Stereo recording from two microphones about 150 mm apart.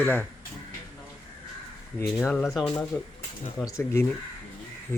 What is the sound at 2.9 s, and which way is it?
Speech, 15° left (ahead or behind).